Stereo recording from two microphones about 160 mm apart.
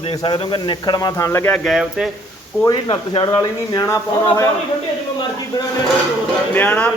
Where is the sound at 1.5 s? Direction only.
Centre (ahead or behind).